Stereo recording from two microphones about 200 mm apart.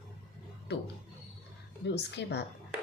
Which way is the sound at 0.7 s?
55° left (ahead or behind).